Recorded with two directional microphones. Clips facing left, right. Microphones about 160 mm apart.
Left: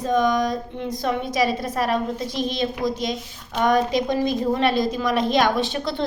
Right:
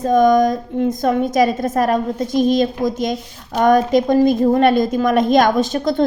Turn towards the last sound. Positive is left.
turn(degrees=-45)  # may be behind; listen again after turning